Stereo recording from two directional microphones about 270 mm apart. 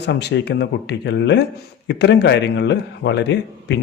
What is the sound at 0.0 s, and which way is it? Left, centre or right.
A man's voice, left.